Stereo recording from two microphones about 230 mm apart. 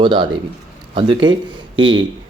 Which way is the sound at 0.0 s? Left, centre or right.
Centre.